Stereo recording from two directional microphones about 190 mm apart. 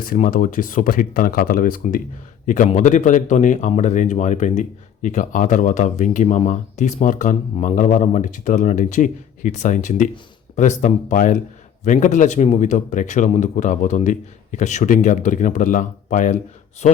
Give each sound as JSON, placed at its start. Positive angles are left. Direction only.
{"t": 0.0, "sound": "speech", "side_deg": 45}